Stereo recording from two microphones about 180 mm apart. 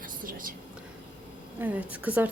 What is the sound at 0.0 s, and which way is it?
Whispering, 50° right (ahead or behind).